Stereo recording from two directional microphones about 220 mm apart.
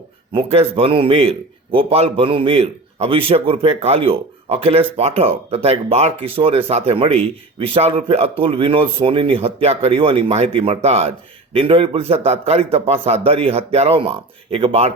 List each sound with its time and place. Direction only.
0.3 s a man's voice: 25° right (ahead or behind)